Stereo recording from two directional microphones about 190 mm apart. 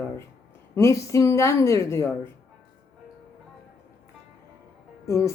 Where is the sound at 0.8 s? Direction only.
15° left (ahead or behind).